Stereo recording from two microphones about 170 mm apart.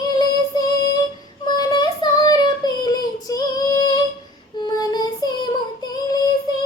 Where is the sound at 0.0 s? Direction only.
20° left (ahead or behind).